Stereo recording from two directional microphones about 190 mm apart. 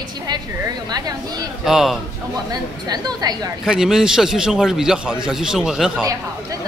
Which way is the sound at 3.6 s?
5° right (ahead or behind).